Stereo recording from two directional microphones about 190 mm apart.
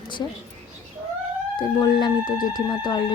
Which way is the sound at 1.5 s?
20° left (ahead or behind).